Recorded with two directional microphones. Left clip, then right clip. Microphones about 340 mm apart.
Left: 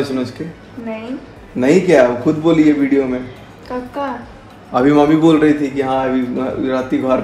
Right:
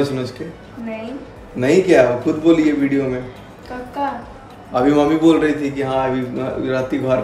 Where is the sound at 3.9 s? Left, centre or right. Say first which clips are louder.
Right 2 dB; centre.